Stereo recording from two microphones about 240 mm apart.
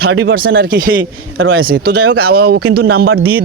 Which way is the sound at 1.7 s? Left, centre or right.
Right.